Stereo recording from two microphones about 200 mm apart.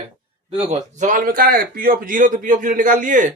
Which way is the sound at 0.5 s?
30° right (ahead or behind).